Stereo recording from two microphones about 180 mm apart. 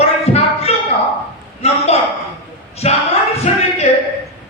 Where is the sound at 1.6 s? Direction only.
35° left (ahead or behind).